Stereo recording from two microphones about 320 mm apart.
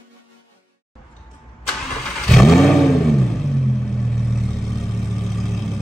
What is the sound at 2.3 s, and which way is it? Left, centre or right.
Roar, centre.